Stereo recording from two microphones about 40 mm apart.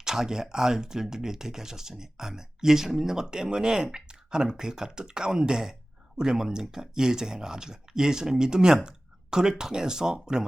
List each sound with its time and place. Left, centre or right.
0.0 s speech: centre